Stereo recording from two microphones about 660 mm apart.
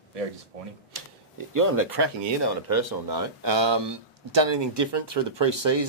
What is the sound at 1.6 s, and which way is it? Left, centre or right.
Speech, right.